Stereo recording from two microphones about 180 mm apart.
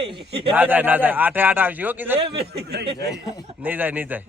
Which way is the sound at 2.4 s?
65° right (ahead or behind).